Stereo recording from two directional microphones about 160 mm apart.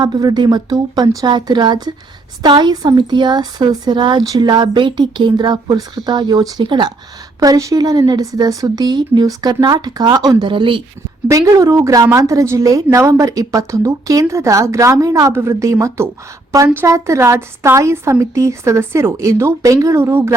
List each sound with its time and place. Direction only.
0.0 s a woman's voice: 25° right (ahead or behind)
11.3 s a woman's voice: 20° right (ahead or behind)